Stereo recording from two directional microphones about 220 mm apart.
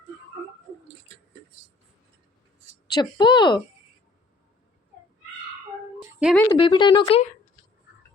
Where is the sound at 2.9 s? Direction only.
20° left (ahead or behind).